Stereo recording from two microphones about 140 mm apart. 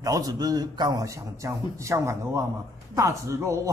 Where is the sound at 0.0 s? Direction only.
25° right (ahead or behind).